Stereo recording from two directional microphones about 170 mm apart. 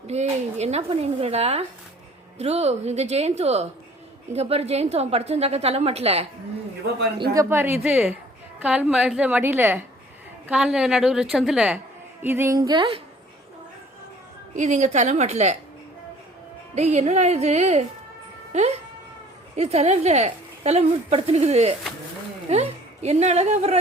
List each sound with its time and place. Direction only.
0.1 s speech: 40° right (ahead or behind)
7.2 s a woman's voice: 15° right (ahead or behind)
14.5 s a woman's voice: 45° right (ahead or behind)
16.7 s a woman's voice: 40° right (ahead or behind)